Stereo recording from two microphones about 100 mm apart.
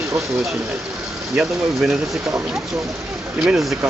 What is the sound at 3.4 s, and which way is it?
Speech, 5° right (ahead or behind).